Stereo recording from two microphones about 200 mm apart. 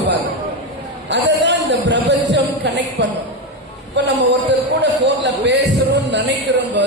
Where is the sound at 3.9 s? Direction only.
60° right (ahead or behind).